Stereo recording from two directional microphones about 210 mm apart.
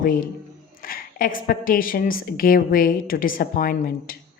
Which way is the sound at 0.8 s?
45° left (ahead or behind).